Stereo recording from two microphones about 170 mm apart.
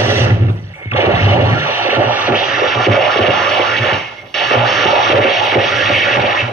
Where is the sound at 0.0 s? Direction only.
15° right (ahead or behind).